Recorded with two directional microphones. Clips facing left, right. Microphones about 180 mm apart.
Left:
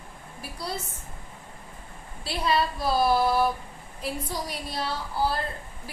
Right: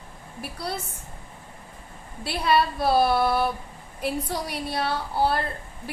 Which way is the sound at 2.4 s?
60° right (ahead or behind).